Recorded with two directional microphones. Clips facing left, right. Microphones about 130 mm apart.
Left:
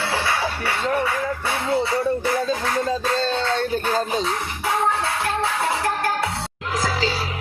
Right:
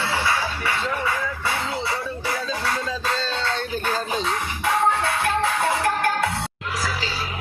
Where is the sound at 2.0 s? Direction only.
50° left (ahead or behind).